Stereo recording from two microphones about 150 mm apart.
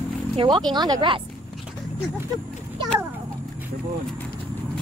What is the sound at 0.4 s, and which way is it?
Speech, 30° right (ahead or behind).